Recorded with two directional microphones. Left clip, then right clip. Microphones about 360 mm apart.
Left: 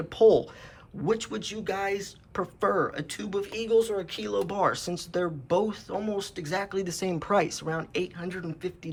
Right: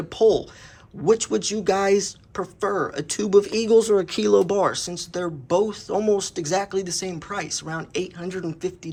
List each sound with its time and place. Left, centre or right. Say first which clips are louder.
0.1 s speech: right 1 dB; centre
2.3 s speech: right 1 dB; centre